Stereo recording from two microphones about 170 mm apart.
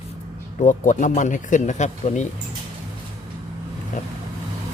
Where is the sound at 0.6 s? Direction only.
45° left (ahead or behind).